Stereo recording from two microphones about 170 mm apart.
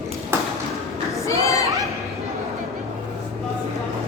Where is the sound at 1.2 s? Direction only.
20° left (ahead or behind).